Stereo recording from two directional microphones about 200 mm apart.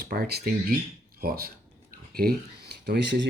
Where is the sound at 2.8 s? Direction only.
60° right (ahead or behind).